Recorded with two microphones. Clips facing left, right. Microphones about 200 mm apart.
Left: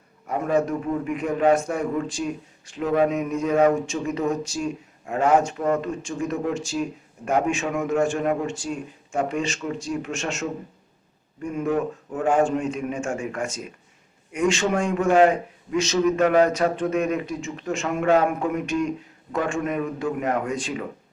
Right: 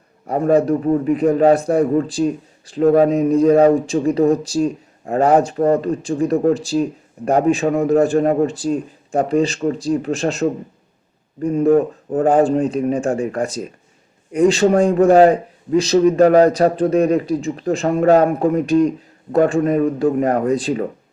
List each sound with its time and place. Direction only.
0.3 s a man's voice: 35° right (ahead or behind)